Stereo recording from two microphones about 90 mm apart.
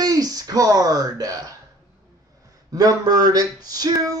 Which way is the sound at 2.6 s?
45° right (ahead or behind).